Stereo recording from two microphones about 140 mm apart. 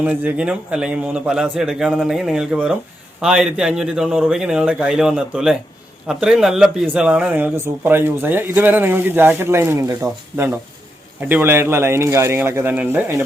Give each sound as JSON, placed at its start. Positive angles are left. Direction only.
{"t": 0.0, "sound": "a man's voice", "side_deg": -10}